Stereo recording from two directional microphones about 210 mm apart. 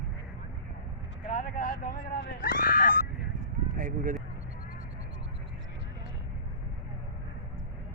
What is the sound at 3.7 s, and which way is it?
Speech, 40° right (ahead or behind).